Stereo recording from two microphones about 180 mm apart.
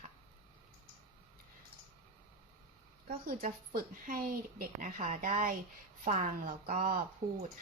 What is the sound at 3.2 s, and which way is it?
Speech, 50° right (ahead or behind).